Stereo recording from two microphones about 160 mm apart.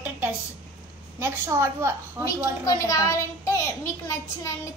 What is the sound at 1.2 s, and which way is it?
A woman's voice, 15° right (ahead or behind).